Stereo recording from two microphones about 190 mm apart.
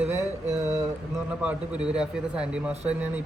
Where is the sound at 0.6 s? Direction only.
15° right (ahead or behind).